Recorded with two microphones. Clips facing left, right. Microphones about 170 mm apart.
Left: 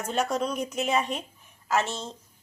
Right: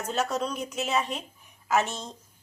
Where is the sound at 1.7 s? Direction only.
15° right (ahead or behind).